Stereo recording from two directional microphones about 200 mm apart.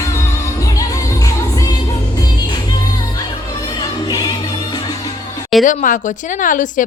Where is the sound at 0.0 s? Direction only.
15° left (ahead or behind).